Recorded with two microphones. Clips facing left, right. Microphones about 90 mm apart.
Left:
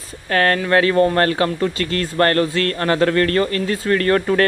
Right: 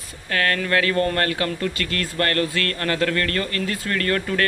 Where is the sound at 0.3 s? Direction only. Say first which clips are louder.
Left 5 dB; 35° left (ahead or behind).